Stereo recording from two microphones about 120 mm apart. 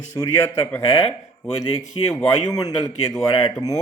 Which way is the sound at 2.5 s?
30° left (ahead or behind).